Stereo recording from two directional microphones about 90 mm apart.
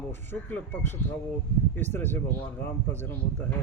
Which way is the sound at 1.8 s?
20° left (ahead or behind).